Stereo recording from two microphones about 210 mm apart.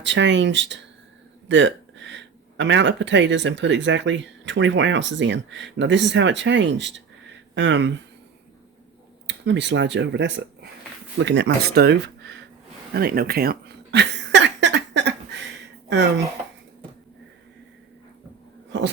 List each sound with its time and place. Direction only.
0.0 s speech: 60° right (ahead or behind)
9.2 s speech: 55° right (ahead or behind)
12.9 s a sound: 45° right (ahead or behind)
15.9 s speech: 55° right (ahead or behind)